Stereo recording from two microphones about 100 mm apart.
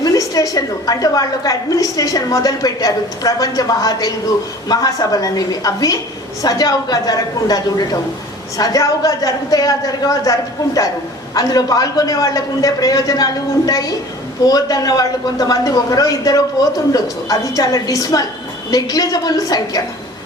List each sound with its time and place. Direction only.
0.0 s a woman's voice: 40° left (ahead or behind)
11.3 s a woman's voice: 40° left (ahead or behind)